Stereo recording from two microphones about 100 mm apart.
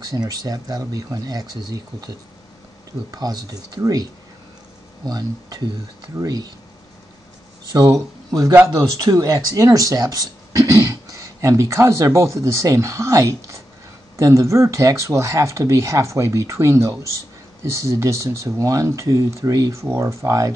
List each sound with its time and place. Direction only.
0.0 s speech: 40° right (ahead or behind)
3.1 s speech: 40° right (ahead or behind)
7.7 s speech: 40° right (ahead or behind)